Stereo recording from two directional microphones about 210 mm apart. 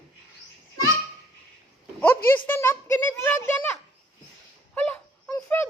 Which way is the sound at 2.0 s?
10° left (ahead or behind).